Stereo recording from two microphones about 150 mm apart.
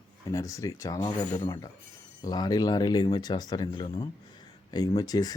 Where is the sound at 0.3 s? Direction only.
20° left (ahead or behind).